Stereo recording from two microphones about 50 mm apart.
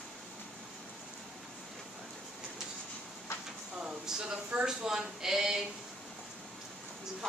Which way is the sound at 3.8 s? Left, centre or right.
Centre.